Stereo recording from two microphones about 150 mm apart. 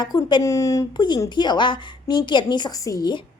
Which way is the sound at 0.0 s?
30° left (ahead or behind).